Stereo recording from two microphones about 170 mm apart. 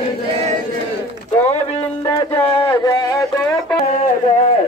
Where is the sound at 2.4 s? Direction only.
30° left (ahead or behind).